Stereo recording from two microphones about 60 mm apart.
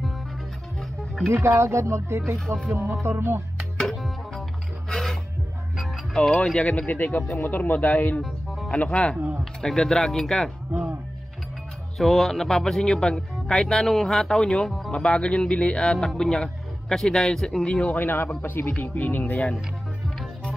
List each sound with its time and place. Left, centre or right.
0.7 s music: centre
1.3 s speech: right
2.7 s speech: right
3.7 s music: centre
6.1 s speech: centre
6.9 s speech: left
8.6 s speech: centre
12.0 s a man's voice: centre
17.6 s speech: centre
17.9 s speech: left